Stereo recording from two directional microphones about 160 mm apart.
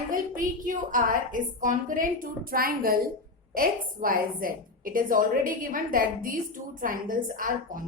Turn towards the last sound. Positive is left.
turn(degrees=-60)  # may be behind; listen again after turning